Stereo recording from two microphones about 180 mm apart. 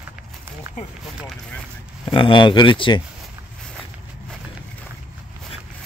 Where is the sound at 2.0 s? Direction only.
30° left (ahead or behind).